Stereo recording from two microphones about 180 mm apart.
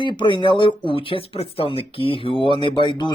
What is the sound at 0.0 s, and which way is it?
Speech, 25° left (ahead or behind).